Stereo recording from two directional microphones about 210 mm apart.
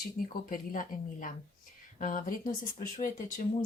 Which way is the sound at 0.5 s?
40° left (ahead or behind).